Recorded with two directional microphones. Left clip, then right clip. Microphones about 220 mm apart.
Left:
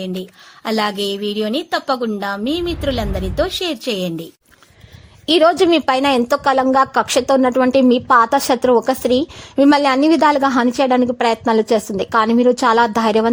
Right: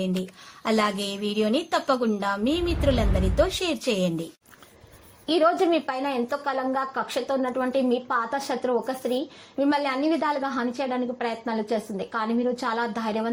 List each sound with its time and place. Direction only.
0.6 s a woman's voice: 25° left (ahead or behind)
5.2 s a woman's voice: 40° left (ahead or behind)